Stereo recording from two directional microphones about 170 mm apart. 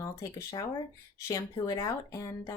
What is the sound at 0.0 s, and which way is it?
Speech, 20° left (ahead or behind).